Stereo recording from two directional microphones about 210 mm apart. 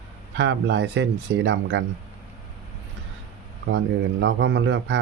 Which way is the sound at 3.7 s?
60° right (ahead or behind).